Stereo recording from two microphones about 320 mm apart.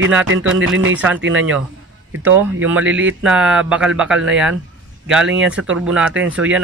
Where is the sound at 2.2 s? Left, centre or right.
Centre.